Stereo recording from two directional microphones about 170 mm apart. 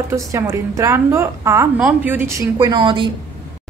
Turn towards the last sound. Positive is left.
turn(degrees=-30)  # may be behind; listen again after turning